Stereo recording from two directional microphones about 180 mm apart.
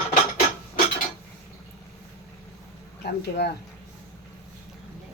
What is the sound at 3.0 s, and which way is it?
Speech, 65° left (ahead or behind).